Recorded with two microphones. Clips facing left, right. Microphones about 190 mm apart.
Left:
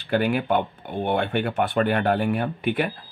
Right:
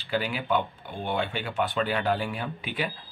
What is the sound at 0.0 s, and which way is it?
Speech, 55° left (ahead or behind).